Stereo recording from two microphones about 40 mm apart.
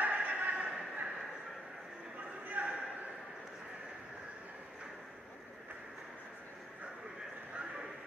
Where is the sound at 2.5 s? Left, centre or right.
Right.